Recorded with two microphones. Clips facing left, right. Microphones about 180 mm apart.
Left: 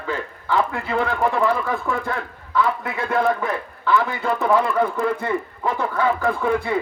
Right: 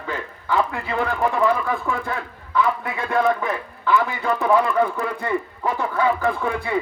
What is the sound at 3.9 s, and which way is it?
Speech, 15° right (ahead or behind).